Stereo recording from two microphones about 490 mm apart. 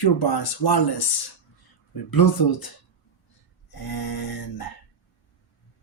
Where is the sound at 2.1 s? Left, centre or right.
Left.